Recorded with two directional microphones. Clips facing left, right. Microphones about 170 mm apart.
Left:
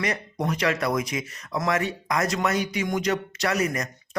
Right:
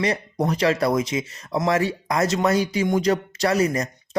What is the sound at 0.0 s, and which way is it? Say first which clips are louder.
Speech: right 4 dB; 30° right (ahead or behind).